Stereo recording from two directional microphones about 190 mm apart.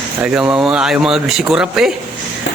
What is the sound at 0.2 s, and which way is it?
Speech, 5° right (ahead or behind).